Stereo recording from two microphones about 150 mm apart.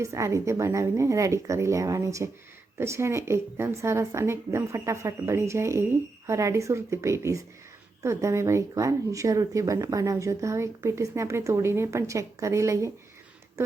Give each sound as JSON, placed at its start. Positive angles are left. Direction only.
{"t": 0.0, "sound": "speech", "side_deg": -20}